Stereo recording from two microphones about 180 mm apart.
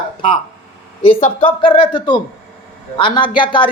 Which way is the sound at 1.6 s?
30° left (ahead or behind).